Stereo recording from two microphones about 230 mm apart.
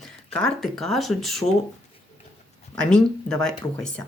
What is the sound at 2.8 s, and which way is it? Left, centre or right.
Speech, centre.